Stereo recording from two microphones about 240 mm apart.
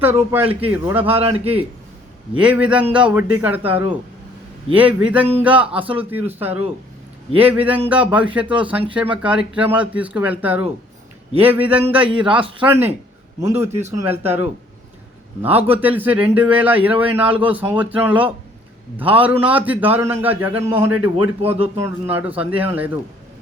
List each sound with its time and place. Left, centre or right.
0.0 s a man's voice: centre
1.0 s a man's voice: right
2.4 s a man's voice: centre
11.9 s a man's voice: right
13.4 s a man's voice: centre
21.4 s a man's voice: right
21.8 s a man's voice: centre